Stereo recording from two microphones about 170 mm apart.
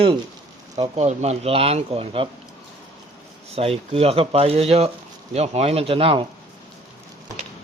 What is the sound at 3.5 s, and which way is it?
Speech, 35° right (ahead or behind).